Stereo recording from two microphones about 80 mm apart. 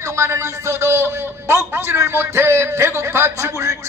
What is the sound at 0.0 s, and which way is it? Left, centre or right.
A man's voice, right.